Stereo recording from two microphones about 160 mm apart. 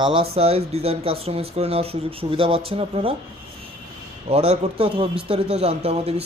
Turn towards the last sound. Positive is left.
turn(degrees=-40)  # may be behind; listen again after turning